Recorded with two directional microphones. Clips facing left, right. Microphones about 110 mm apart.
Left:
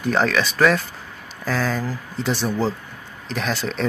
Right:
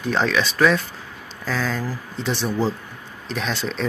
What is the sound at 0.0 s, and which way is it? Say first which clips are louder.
Speech: left 1 dB; centre (ahead or behind).